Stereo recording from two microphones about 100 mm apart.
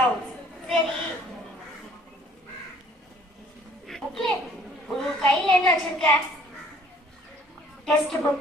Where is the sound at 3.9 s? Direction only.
5° left (ahead or behind).